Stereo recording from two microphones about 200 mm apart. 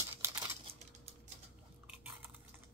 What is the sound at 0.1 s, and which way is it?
Crumpling, 10° right (ahead or behind).